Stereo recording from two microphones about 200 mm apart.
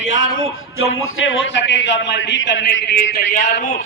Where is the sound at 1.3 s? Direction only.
70° left (ahead or behind); by 3.2 s 55° left (ahead or behind).